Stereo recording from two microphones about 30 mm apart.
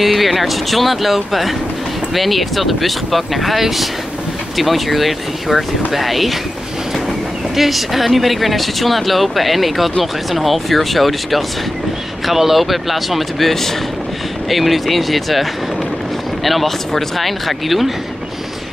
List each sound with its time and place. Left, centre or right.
0.0 s speech: centre
7.5 s speech: centre
16.4 s speech: centre